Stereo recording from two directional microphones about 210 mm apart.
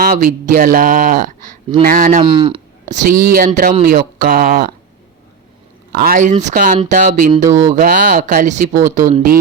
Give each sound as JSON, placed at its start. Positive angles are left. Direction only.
{"t": 0.0, "sound": "speech", "side_deg": -40}
{"t": 2.2, "sound": "speech", "side_deg": -25}
{"t": 2.9, "sound": "speech", "side_deg": -40}
{"t": 5.9, "sound": "speech", "side_deg": -45}
{"t": 7.4, "sound": "speech", "side_deg": -15}
{"t": 7.7, "sound": "speech", "side_deg": -40}